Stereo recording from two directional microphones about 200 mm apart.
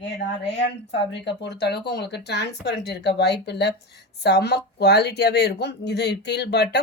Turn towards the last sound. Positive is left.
turn(degrees=55)  # may be behind; listen again after turning